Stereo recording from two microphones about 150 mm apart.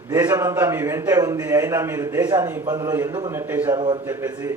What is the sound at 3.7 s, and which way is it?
Speech, 30° right (ahead or behind).